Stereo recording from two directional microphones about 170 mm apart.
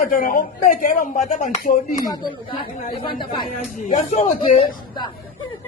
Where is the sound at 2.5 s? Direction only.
30° left (ahead or behind).